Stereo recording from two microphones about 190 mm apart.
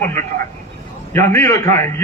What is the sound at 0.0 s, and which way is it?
A man's voice, 15° left (ahead or behind).